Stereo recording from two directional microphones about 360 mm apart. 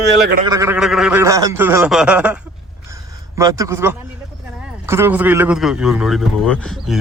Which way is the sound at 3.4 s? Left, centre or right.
Centre.